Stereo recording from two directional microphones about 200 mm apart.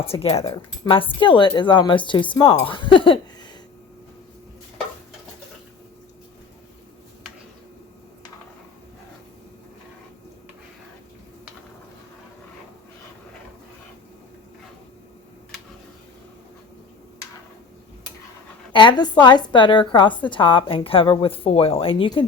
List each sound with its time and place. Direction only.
0.0 s a woman's voice: 30° left (ahead or behind)
18.7 s a woman's voice: 25° left (ahead or behind)